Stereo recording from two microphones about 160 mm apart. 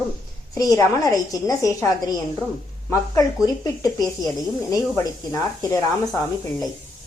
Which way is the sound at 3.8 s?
25° left (ahead or behind).